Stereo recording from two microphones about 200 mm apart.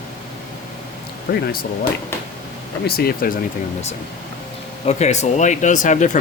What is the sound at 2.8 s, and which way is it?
Speech, 50° left (ahead or behind).